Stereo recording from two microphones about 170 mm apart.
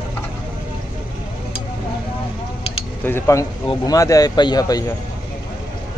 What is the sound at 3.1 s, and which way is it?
Speech, 15° left (ahead or behind).